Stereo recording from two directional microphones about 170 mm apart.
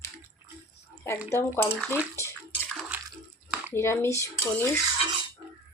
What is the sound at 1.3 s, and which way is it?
Speech, 15° left (ahead or behind).